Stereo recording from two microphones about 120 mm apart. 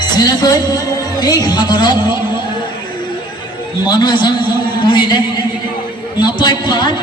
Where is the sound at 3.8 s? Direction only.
40° left (ahead or behind).